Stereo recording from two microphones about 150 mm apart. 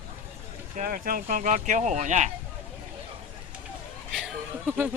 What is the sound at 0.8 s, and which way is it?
Speech, 70° right (ahead or behind).